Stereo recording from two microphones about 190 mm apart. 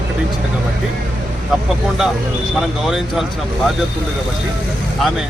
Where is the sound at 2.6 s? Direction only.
Centre (ahead or behind).